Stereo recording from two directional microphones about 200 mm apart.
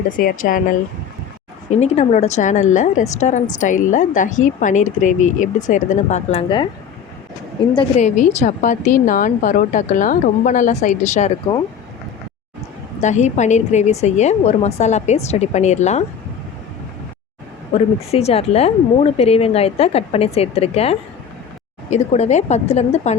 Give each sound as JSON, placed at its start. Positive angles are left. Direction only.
{"t": 0.2, "sound": "a woman's voice", "side_deg": 45}
{"t": 1.7, "sound": "speech", "side_deg": 35}
{"t": 7.9, "sound": "speech", "side_deg": 35}
{"t": 13.0, "sound": "speech", "side_deg": 35}
{"t": 18.1, "sound": "speech", "side_deg": 30}